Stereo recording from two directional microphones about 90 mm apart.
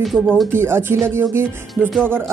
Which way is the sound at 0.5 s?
25° right (ahead or behind).